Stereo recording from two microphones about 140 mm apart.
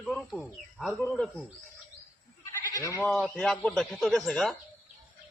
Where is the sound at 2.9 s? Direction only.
10° left (ahead or behind).